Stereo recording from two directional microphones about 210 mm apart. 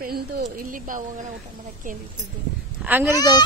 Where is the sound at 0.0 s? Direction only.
40° right (ahead or behind).